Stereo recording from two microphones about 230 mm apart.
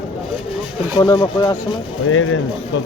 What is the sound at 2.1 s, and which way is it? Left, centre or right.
Speech, left.